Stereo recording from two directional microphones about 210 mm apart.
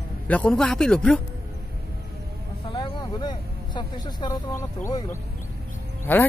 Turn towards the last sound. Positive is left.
turn(degrees=10)  # may be behind; listen again after turning